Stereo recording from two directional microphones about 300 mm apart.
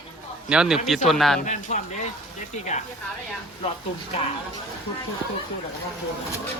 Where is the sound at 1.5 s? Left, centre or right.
Left.